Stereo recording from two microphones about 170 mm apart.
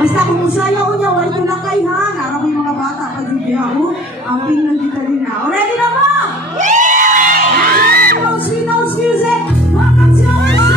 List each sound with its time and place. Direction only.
6.6 s music: 45° right (ahead or behind)